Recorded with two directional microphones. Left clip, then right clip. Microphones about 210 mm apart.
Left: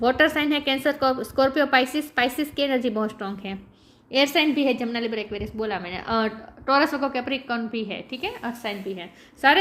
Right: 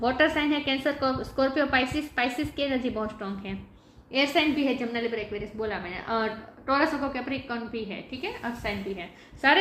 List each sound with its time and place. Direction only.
0.0 s a woman's voice: 40° left (ahead or behind)